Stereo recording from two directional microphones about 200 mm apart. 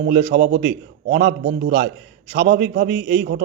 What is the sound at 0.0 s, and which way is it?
A man's voice, 55° right (ahead or behind).